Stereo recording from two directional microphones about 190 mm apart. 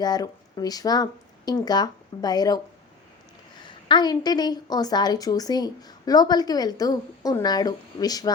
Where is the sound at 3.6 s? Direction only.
25° left (ahead or behind).